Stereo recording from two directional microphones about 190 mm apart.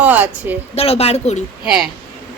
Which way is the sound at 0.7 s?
30° left (ahead or behind).